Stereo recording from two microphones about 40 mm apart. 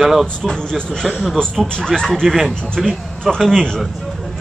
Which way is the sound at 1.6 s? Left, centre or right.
Centre.